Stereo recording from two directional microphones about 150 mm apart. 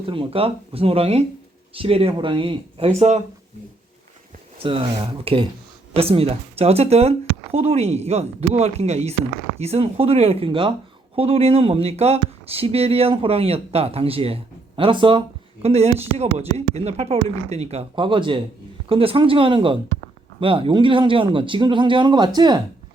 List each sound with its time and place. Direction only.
0.0 s speech: 35° right (ahead or behind)
4.5 s speech: 40° right (ahead or behind)